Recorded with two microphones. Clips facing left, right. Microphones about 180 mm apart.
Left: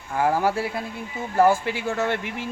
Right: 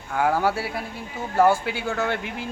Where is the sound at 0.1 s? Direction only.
5° left (ahead or behind).